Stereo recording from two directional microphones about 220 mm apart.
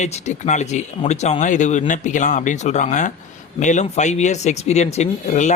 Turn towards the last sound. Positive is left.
turn(degrees=30)  # may be behind; listen again after turning